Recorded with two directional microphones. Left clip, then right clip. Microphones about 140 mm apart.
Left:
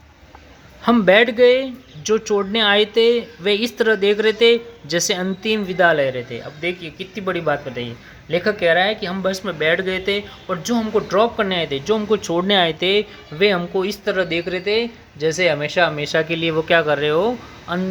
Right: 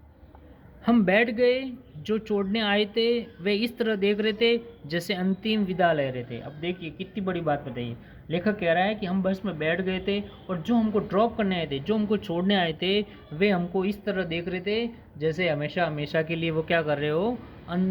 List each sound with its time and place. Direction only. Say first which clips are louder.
0.9 s speech: left 9 dB; 35° left (ahead or behind)